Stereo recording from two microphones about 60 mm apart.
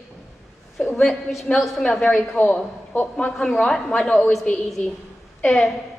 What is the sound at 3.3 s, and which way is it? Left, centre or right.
Speech, centre.